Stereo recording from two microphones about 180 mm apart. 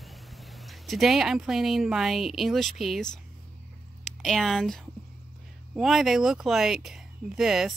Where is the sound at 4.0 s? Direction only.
Centre (ahead or behind).